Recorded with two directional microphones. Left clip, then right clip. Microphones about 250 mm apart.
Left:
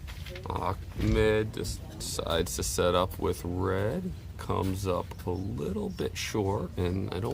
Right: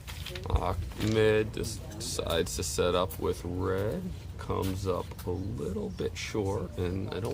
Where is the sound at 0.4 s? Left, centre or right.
Centre.